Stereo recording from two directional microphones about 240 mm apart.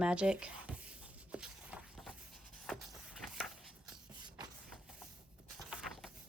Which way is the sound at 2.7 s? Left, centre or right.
Centre.